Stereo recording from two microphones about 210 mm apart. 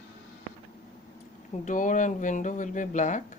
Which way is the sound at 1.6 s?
35° left (ahead or behind).